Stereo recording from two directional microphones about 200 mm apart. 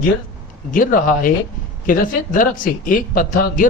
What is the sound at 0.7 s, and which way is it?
A man's voice, 45° left (ahead or behind).